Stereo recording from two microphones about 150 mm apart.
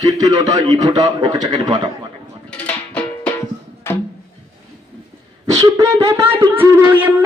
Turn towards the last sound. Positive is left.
turn(degrees=-10)  # may be behind; listen again after turning